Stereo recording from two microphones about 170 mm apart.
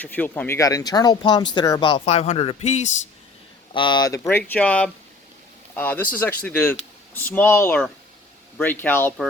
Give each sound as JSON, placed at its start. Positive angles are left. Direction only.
{"t": 0.0, "sound": "speech", "side_deg": 10}
{"t": 3.7, "sound": "speech", "side_deg": 30}